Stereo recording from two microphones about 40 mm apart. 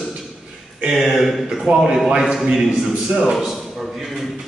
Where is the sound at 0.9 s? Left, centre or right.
Centre.